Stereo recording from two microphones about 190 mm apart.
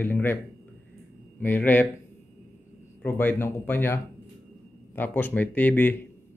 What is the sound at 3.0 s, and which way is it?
Speech, 10° left (ahead or behind).